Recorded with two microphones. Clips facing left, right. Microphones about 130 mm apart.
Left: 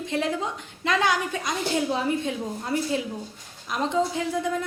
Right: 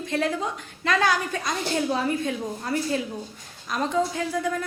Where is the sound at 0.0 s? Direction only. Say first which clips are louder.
Right 1 dB; 20° left (ahead or behind).